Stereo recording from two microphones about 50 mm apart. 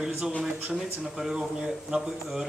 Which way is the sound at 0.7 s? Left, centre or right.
Centre.